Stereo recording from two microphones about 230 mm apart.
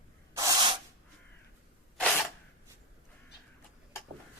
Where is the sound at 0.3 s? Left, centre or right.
Centre.